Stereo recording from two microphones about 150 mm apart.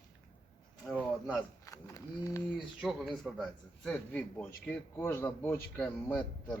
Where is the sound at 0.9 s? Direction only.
5° right (ahead or behind).